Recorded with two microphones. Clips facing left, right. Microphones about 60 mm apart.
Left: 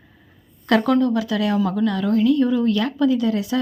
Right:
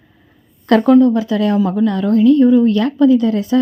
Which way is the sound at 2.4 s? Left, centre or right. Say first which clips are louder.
Right 8 dB; right.